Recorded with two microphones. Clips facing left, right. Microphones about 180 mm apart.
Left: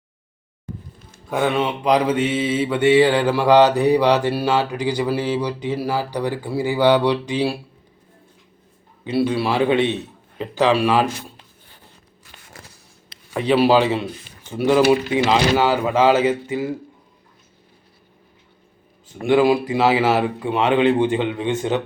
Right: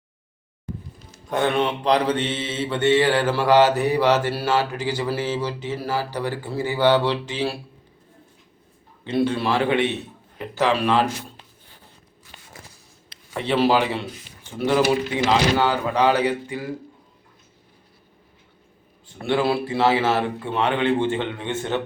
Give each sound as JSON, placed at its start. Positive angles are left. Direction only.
{"t": 1.3, "sound": "mantra", "side_deg": 5}
{"t": 9.0, "sound": "mantra", "side_deg": 10}
{"t": 13.3, "sound": "mantra", "side_deg": 15}
{"t": 15.3, "sound": "a man's voice", "side_deg": 15}
{"t": 19.2, "sound": "mantra", "side_deg": 15}